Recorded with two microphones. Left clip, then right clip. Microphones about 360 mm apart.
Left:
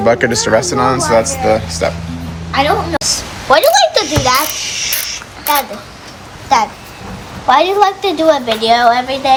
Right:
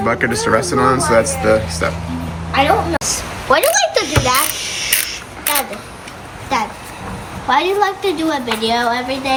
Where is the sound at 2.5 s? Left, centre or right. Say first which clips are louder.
Left 1 dB; left.